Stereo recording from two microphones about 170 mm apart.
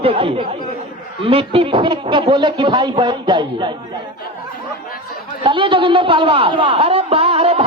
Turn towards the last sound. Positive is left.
turn(degrees=-35)  # may be behind; listen again after turning